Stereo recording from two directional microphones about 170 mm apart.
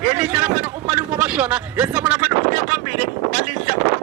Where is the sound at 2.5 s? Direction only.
50° right (ahead or behind).